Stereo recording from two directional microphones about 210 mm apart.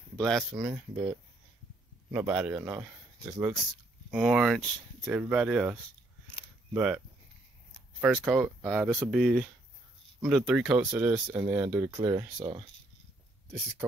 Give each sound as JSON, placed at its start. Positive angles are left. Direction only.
{"t": 0.2, "sound": "speech", "side_deg": 0}
{"t": 2.1, "sound": "speech", "side_deg": -5}
{"t": 6.3, "sound": "a sound", "side_deg": -5}
{"t": 8.0, "sound": "speech", "side_deg": -5}
{"t": 12.4, "sound": "speech", "side_deg": -25}